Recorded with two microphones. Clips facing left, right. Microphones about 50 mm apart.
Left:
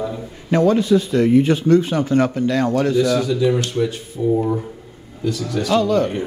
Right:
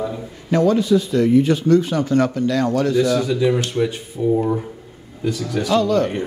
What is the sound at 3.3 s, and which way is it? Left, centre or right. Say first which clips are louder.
Speech: even; centre.